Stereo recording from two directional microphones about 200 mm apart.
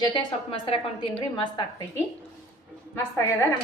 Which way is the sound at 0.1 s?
25° left (ahead or behind).